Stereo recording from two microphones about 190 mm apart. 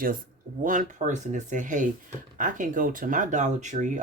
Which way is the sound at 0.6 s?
45° right (ahead or behind).